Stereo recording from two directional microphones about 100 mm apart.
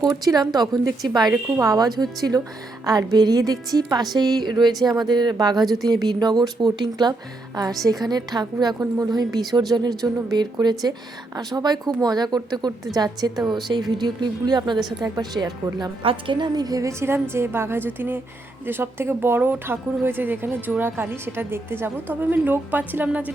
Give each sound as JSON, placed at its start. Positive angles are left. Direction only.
{"t": 0.0, "sound": "a woman's voice", "side_deg": -40}
{"t": 16.0, "sound": "a woman's voice", "side_deg": -55}